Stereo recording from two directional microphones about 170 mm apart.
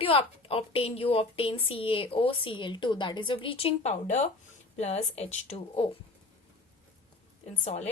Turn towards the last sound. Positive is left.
turn(degrees=40)  # may be behind; listen again after turning